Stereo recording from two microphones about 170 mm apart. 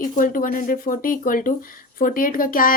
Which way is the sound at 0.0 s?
55° left (ahead or behind).